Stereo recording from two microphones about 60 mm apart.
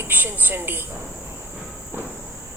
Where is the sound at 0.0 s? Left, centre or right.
Right.